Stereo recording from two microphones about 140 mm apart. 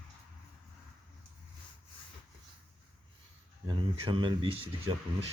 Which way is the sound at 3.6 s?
35° right (ahead or behind).